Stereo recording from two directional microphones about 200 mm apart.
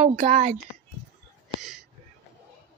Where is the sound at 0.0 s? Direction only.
35° right (ahead or behind).